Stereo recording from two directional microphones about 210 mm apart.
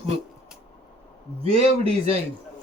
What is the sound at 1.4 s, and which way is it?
Speech, 30° right (ahead or behind).